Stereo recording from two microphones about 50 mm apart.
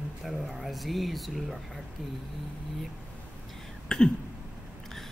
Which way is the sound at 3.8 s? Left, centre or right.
Centre.